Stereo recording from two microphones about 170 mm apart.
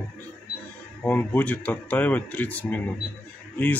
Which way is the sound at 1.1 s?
10° left (ahead or behind).